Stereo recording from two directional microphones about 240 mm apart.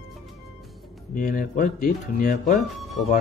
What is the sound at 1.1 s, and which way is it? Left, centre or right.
Speech, left.